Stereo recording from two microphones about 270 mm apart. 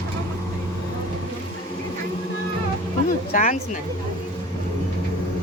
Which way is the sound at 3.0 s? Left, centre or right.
Left.